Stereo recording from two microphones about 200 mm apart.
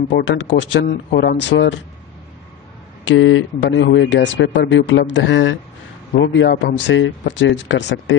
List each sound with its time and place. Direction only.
0.1 s speech: 65° left (ahead or behind)
3.1 s speech: 70° left (ahead or behind)